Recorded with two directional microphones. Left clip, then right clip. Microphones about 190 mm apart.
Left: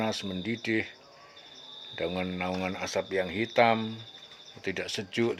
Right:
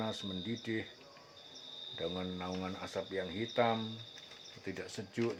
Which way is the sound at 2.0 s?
45° left (ahead or behind).